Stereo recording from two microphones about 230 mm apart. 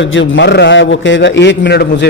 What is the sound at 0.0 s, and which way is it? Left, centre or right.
Speech, left.